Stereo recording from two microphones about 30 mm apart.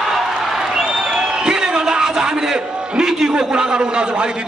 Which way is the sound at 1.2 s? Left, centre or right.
Right.